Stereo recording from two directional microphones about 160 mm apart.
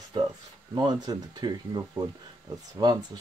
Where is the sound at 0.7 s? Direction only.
25° right (ahead or behind).